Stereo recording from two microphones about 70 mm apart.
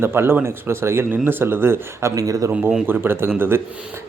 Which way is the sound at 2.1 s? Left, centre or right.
Right.